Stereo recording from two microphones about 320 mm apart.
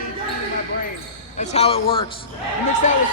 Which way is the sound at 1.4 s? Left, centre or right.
Centre.